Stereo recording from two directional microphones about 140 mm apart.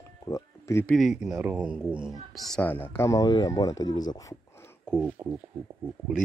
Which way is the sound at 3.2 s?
30° left (ahead or behind).